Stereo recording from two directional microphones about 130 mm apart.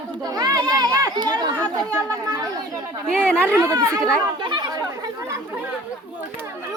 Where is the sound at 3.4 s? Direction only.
15° right (ahead or behind).